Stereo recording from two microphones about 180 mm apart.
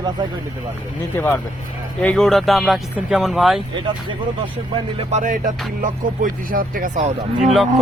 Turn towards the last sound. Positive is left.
turn(degrees=0)  # may be behind; listen again after turning